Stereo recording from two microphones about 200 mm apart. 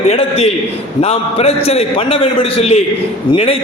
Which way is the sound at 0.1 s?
30° left (ahead or behind).